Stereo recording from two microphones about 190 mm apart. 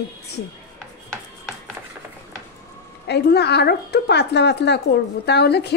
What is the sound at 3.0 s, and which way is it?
A woman's voice, 60° left (ahead or behind).